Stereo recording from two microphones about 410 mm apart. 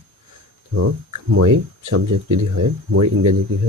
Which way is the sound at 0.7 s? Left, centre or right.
Right.